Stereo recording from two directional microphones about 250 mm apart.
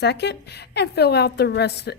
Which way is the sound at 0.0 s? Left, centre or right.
Left.